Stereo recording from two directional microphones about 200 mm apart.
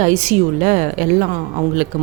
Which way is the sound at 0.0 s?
35° right (ahead or behind).